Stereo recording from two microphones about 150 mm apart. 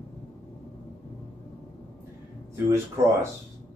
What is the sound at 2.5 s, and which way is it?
Speech, 20° right (ahead or behind).